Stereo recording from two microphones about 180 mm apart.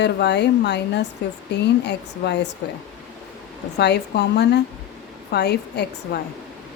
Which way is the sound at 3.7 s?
70° left (ahead or behind).